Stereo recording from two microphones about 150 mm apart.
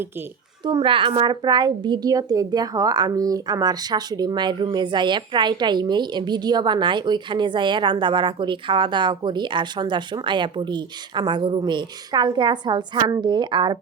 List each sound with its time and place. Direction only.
0.6 s a woman's voice: 35° right (ahead or behind)